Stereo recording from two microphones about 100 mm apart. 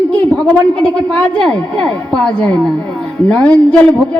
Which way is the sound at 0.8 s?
15° left (ahead or behind).